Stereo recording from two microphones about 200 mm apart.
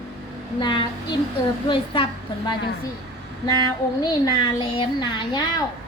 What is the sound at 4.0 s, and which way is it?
A woman's voice, 20° left (ahead or behind).